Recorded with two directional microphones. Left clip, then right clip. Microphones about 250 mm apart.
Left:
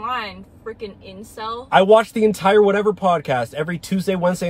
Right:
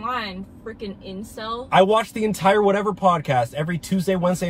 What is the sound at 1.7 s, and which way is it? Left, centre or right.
Speech, centre.